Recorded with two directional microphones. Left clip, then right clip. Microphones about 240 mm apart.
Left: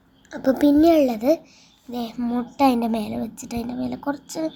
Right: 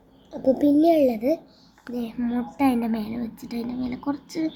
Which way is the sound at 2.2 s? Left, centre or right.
Left.